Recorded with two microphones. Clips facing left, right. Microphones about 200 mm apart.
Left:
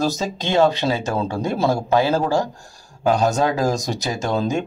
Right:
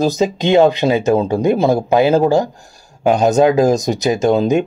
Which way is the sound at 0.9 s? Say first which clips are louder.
Right 8 dB; 20° right (ahead or behind).